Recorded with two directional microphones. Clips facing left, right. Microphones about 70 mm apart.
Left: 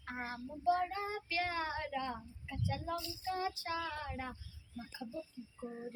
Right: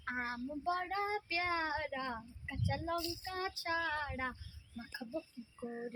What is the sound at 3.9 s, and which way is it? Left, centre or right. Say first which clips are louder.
Speech: right 3 dB; right.